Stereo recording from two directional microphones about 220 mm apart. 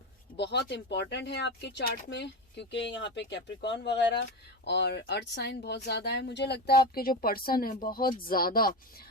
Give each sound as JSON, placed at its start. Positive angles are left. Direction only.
{"t": 0.3, "sound": "speech", "side_deg": 50}